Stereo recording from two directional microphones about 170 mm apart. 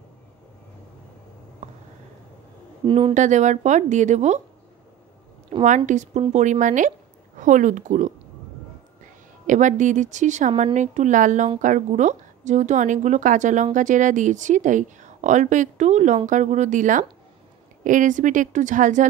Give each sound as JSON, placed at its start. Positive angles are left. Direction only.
{"t": 2.8, "sound": "speech", "side_deg": -30}
{"t": 3.2, "sound": "a woman's voice", "side_deg": -45}
{"t": 5.5, "sound": "a woman's voice", "side_deg": -40}
{"t": 9.5, "sound": "a woman's voice", "side_deg": -45}